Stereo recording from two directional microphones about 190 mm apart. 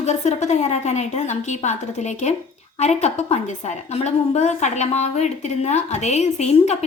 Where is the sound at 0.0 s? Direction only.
35° left (ahead or behind).